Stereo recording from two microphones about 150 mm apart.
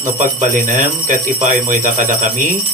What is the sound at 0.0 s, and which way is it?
Speech, 60° right (ahead or behind).